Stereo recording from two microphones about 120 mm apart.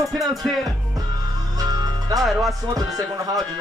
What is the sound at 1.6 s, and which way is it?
Music, 30° right (ahead or behind).